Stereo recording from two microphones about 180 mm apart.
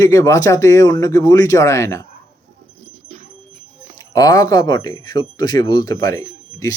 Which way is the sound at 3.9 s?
20° left (ahead or behind).